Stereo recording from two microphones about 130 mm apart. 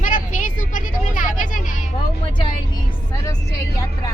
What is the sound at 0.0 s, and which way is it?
Vehicle, 90° left.